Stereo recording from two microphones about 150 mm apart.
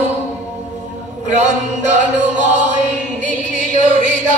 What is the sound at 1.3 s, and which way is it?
Chant, 50° right (ahead or behind).